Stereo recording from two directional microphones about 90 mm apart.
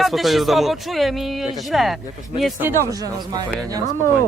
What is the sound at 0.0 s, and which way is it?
A man's voice, centre (ahead or behind).